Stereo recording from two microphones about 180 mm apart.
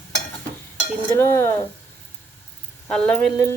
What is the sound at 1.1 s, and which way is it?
Stir, 15° left (ahead or behind).